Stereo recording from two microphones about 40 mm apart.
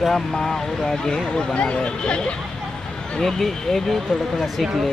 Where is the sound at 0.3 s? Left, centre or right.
Centre.